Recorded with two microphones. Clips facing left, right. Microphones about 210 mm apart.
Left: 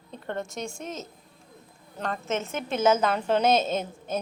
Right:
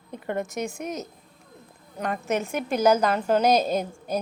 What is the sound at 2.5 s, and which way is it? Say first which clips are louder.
A woman's voice: right 2 dB; centre (ahead or behind).